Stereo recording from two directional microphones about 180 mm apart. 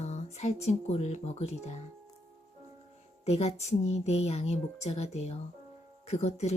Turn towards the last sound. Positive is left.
turn(degrees=35)  # may be behind; listen again after turning